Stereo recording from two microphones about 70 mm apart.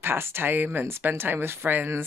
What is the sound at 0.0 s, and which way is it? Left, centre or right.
Speech, right.